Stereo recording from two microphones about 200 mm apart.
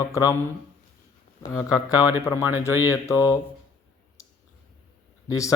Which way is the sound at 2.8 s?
15° left (ahead or behind).